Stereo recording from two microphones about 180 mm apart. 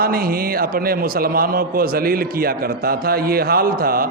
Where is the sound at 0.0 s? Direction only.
55° right (ahead or behind).